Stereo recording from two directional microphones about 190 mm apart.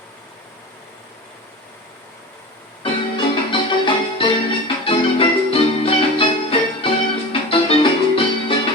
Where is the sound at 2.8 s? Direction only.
25° left (ahead or behind).